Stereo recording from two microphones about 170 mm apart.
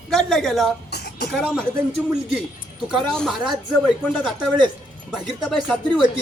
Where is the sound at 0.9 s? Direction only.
75° left (ahead or behind).